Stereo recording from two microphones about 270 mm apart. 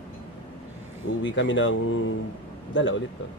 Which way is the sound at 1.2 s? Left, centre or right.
Left.